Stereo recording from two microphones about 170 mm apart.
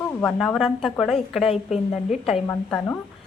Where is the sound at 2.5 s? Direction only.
10° left (ahead or behind).